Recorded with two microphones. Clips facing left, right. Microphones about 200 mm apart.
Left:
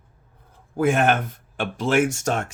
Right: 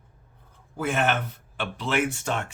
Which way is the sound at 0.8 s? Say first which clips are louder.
Left 6 dB; 50° left (ahead or behind).